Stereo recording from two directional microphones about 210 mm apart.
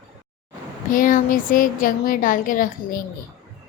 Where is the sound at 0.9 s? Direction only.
40° left (ahead or behind).